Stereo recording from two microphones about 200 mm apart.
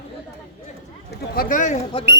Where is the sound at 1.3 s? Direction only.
40° left (ahead or behind).